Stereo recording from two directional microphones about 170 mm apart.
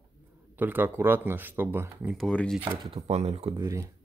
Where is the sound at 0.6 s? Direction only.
10° right (ahead or behind).